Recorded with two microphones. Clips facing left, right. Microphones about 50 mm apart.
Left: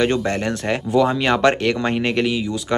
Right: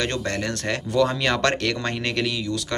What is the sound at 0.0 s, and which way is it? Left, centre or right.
Speech, centre.